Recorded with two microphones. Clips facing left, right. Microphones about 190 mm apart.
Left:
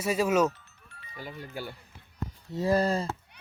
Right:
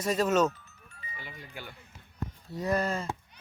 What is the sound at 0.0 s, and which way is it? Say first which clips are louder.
Speech: left 1 dB; 10° left (ahead or behind).